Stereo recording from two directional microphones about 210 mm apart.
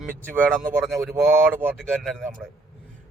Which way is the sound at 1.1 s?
10° right (ahead or behind).